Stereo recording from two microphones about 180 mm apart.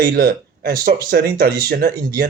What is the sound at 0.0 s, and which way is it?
Speech, 55° right (ahead or behind).